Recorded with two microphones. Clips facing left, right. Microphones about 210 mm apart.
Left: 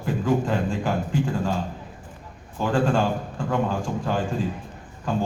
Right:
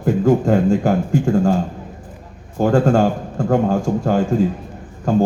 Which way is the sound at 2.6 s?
45° right (ahead or behind).